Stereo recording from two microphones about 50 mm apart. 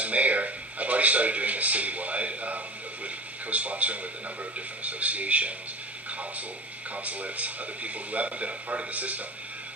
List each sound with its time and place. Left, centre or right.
0.0 s a man's voice: right
7.1 s a man's voice: right